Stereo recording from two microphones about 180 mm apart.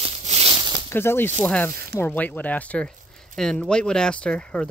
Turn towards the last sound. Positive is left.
turn(degrees=5)  # may be behind; listen again after turning